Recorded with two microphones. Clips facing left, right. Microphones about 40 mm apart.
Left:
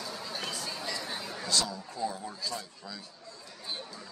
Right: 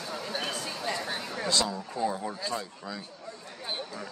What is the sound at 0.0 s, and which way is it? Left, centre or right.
Chatter, right.